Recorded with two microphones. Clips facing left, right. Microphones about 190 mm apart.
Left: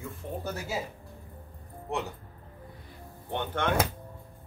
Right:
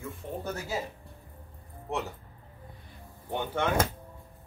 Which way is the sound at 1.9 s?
Centre (ahead or behind).